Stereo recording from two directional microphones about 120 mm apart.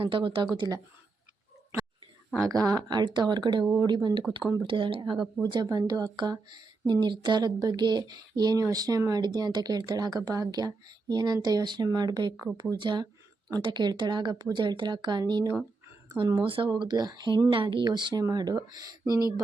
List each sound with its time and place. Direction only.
0.0 s speech: 45° right (ahead or behind)
2.5 s speech: 30° right (ahead or behind)
5.4 s speech: 35° right (ahead or behind)